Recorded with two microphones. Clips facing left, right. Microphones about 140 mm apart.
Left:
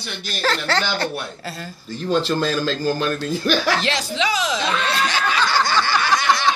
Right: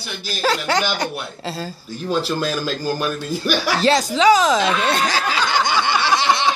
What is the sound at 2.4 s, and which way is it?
A man's voice, 10° right (ahead or behind).